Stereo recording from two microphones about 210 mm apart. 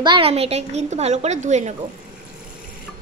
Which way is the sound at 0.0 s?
25° right (ahead or behind).